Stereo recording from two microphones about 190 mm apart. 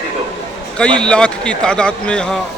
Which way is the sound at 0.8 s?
5° left (ahead or behind).